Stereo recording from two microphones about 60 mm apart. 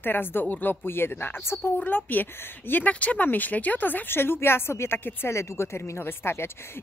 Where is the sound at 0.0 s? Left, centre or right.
Left.